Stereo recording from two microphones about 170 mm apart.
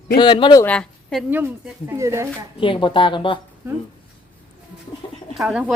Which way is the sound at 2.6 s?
30° left (ahead or behind).